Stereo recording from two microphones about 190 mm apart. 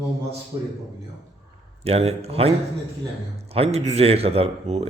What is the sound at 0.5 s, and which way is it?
Speech, 20° right (ahead or behind).